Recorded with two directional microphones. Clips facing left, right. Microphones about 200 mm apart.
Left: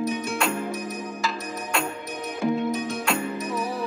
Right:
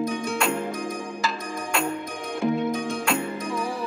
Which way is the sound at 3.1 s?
Centre (ahead or behind).